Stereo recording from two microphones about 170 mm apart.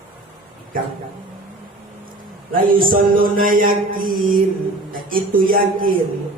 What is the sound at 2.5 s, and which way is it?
A man's voice, 55° right (ahead or behind).